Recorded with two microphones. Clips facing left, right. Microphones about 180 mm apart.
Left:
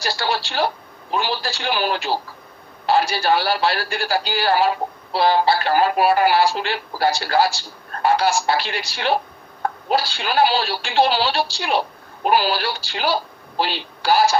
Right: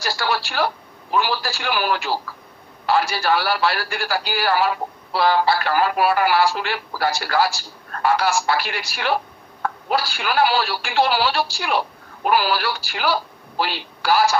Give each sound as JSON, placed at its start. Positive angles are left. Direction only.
{"t": 0.0, "sound": "a man's voice", "side_deg": 25}